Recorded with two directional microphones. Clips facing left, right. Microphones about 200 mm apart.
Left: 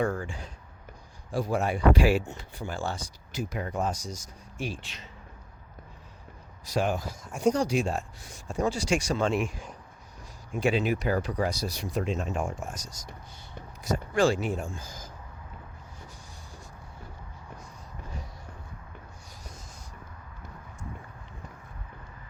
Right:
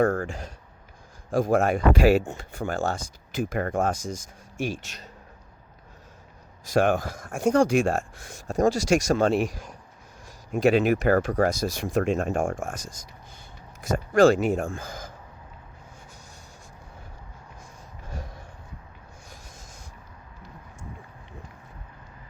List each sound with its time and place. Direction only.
0.0 s speech: 45° right (ahead or behind)
6.7 s speech: 55° right (ahead or behind)
10.7 s speech: 50° right (ahead or behind)